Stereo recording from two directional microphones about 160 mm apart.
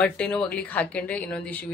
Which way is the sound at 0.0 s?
5° left (ahead or behind).